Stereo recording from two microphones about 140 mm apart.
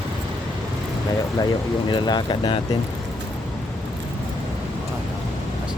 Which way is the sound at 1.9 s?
30° left (ahead or behind).